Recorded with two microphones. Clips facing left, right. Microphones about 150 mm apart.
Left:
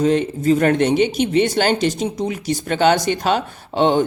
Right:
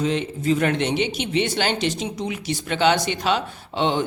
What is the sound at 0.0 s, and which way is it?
A man's voice, 45° left (ahead or behind).